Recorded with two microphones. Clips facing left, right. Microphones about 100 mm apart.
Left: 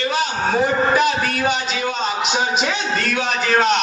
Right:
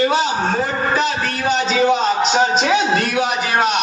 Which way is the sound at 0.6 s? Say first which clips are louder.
Left 2 dB; 15° left (ahead or behind).